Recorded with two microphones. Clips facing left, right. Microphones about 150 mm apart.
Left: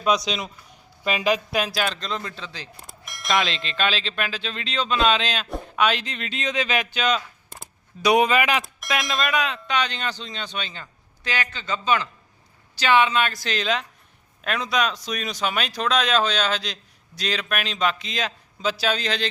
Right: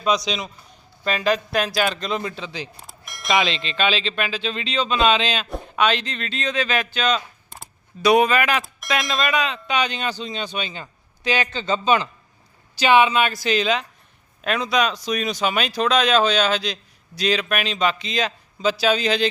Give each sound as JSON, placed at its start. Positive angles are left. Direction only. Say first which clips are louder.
{"t": 0.3, "sound": "speech", "louder": "right 1 dB", "side_deg": 0}
{"t": 2.7, "sound": "speech", "louder": "right 1 dB", "side_deg": 0}
{"t": 8.6, "sound": "speech", "louder": "right 2 dB", "side_deg": 0}
{"t": 11.5, "sound": "a man's voice", "louder": "right 2 dB", "side_deg": -25}